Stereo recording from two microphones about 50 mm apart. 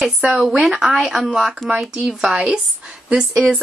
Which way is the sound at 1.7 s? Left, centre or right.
Right.